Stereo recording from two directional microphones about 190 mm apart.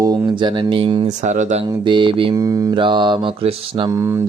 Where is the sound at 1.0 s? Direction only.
40° right (ahead or behind).